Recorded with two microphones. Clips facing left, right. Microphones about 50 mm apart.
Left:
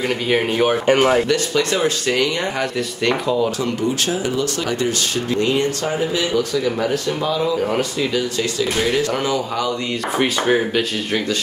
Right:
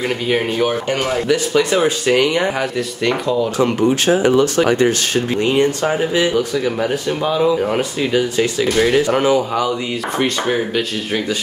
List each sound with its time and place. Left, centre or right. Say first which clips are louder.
0.8 s speech: left 4 dB; left
1.3 s speech: right 3 dB; centre
3.1 s speech: right 1 dB; centre
3.6 s speech: right 6 dB; right; by 8.1 s centre
8.1 s speech: right 4 dB; right
10.1 s speech: left 1 dB; centre